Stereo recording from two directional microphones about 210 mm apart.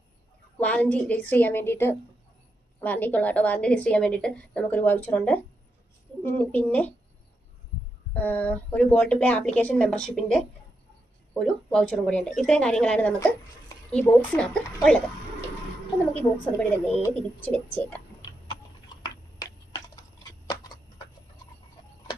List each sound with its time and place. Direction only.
0.6 s a woman's voice: 5° left (ahead or behind)
8.1 s a woman's voice: 10° left (ahead or behind)
16.1 s a woman's voice: 5° left (ahead or behind)
19.0 s a sound: 20° left (ahead or behind)